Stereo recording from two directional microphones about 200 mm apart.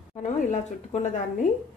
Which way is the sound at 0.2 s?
35° left (ahead or behind).